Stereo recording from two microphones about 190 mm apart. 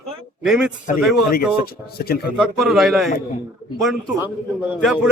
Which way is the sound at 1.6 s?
55° left (ahead or behind).